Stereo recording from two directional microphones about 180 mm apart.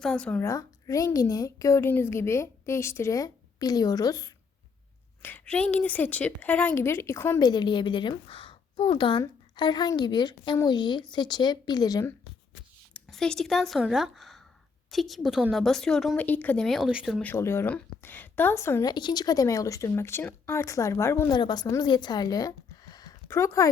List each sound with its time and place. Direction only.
0.0 s speech: 5° left (ahead or behind)
0.4 s speech: 20° left (ahead or behind)
5.2 s a woman's voice: 10° left (ahead or behind)
12.9 s speech: 5° left (ahead or behind)